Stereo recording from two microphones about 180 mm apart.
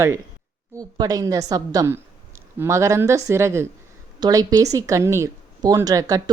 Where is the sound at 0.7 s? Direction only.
20° right (ahead or behind).